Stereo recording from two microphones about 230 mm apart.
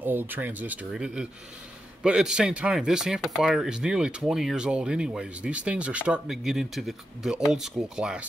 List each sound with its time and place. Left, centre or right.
0.0 s speech: centre